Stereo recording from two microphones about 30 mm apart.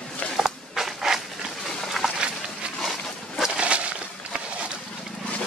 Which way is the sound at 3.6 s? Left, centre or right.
Right.